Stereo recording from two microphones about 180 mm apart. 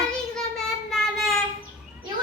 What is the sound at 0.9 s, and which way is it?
Child singing, centre (ahead or behind).